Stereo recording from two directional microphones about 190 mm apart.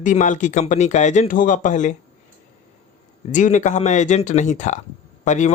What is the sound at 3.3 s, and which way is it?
Speech, 40° left (ahead or behind).